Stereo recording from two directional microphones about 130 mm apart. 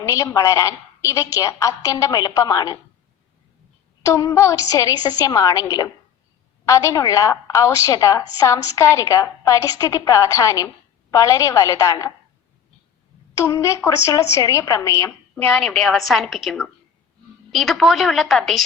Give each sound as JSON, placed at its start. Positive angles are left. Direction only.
{"t": 0.0, "sound": "a woman's voice", "side_deg": 25}
{"t": 4.0, "sound": "a woman's voice", "side_deg": 25}
{"t": 13.3, "sound": "a woman's voice", "side_deg": 25}